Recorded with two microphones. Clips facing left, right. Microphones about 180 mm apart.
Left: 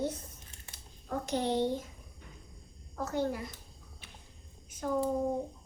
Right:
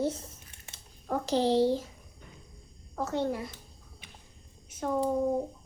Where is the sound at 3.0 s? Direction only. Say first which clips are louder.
Right 2 dB; 25° right (ahead or behind).